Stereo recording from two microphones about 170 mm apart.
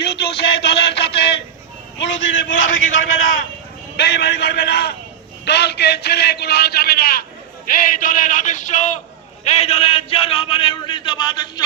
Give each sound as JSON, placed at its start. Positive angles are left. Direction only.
{"t": 0.2, "sound": "a sound", "side_deg": 70}
{"t": 2.0, "sound": "a man's voice", "side_deg": 90}
{"t": 3.9, "sound": "a man's voice", "side_deg": 80}